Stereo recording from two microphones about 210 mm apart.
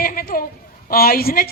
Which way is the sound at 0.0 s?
45° left (ahead or behind).